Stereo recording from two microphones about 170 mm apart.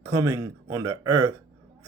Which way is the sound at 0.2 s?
20° right (ahead or behind).